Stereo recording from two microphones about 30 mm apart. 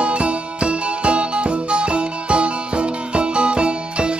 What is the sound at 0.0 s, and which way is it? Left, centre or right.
Music, right.